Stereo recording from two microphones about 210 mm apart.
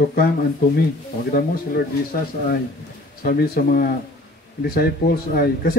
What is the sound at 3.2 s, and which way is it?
Speech, 45° left (ahead or behind).